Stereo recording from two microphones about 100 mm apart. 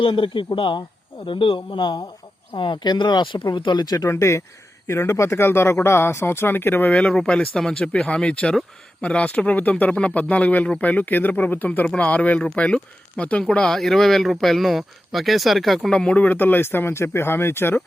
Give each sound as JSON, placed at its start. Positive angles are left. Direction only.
{"t": 0.0, "sound": "speech", "side_deg": 60}